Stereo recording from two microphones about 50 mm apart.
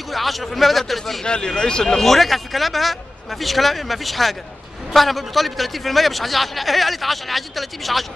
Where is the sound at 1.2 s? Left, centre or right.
Centre.